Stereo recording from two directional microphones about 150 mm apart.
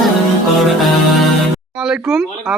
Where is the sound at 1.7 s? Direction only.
5° right (ahead or behind).